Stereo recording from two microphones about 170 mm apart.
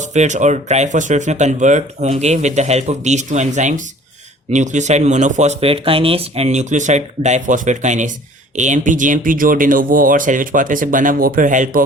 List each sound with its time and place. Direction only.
0.0 s speech: 45° right (ahead or behind)